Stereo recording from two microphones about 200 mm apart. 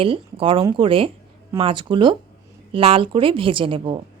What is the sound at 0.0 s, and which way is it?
A woman's voice, 25° right (ahead or behind).